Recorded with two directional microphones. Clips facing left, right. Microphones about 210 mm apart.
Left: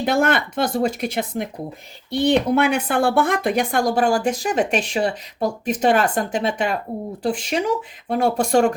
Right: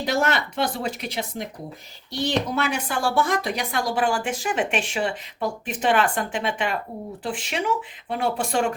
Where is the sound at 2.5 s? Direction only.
60° left (ahead or behind).